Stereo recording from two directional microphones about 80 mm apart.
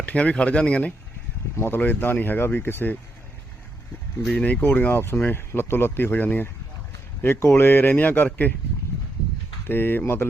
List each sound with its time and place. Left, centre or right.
0.0 s speech: centre
1.5 s speech: left
4.3 s speech: centre
9.6 s speech: left